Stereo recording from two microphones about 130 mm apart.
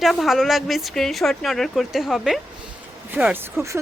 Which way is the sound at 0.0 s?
Centre (ahead or behind).